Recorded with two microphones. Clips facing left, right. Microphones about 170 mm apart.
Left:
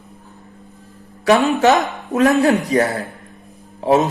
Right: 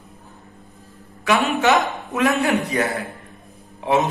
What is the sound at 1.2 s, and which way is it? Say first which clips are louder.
A man's voice: left 5 dB; 35° left (ahead or behind).